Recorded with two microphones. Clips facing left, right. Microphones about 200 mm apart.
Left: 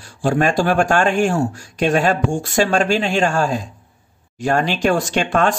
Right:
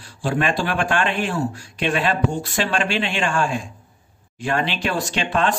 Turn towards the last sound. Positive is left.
turn(degrees=45)  # may be behind; listen again after turning